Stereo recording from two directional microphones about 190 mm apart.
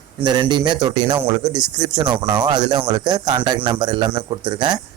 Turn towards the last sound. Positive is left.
turn(degrees=-25)  # may be behind; listen again after turning